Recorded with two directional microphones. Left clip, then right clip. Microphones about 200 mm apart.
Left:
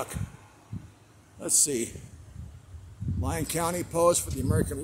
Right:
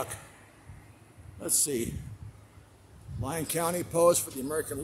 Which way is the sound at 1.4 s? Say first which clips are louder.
Left 3 dB; 15° left (ahead or behind).